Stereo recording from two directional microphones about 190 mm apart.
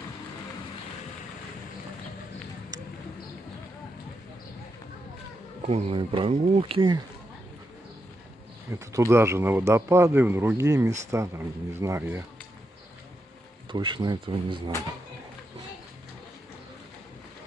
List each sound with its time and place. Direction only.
5.7 s speech: 30° right (ahead or behind)
8.7 s speech: 15° right (ahead or behind)
13.7 s speech: 25° right (ahead or behind)